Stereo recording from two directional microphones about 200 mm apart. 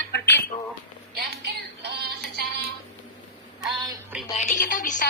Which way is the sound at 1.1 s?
55° right (ahead or behind).